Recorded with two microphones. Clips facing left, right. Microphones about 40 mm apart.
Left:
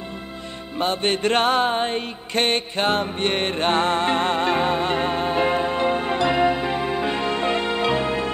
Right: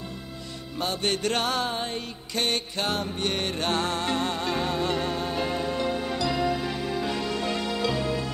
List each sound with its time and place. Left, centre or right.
0.7 s music: left